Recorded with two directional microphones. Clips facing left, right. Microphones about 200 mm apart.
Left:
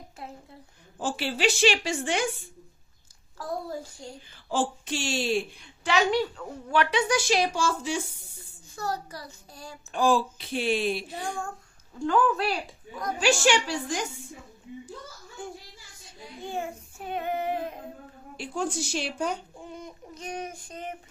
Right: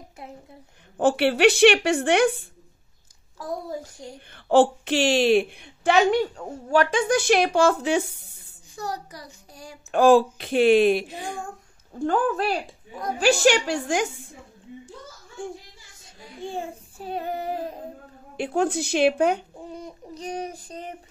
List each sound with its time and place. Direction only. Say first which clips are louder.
0.9 s a woman's voice: right 10 dB; 60° right (ahead or behind)
4.3 s a woman's voice: right 11 dB; 60° right (ahead or behind)
8.7 s a child's voice: even; 15° right (ahead or behind)
9.8 s a woman's voice: right 8 dB; 65° right (ahead or behind)
11.9 s a woman's voice: right 1 dB; 50° right (ahead or behind)
16.4 s child singing: right 1 dB; 30° right (ahead or behind)
18.3 s a woman's voice: right 7 dB; 60° right (ahead or behind)
19.6 s child singing: right 4 dB; 35° right (ahead or behind)